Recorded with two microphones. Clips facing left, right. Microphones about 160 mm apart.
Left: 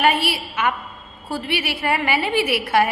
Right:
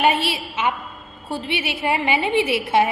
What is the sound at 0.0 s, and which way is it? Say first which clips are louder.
A woman's voice: even; 25° right (ahead or behind).